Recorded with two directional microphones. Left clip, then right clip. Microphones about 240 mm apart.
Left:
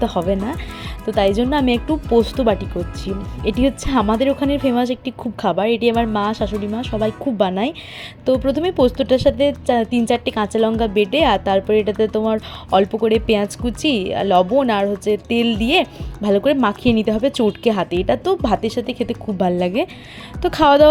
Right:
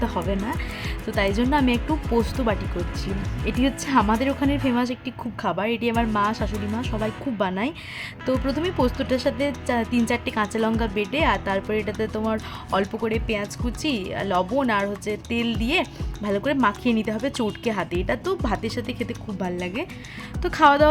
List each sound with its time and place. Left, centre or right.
0.0 s speech: centre
1.9 s speech: centre
7.0 s speech: centre